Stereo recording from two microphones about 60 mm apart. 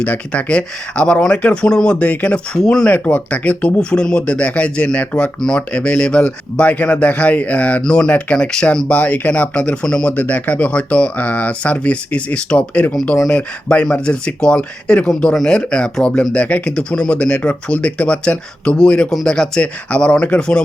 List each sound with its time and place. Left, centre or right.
0.0 s speech: left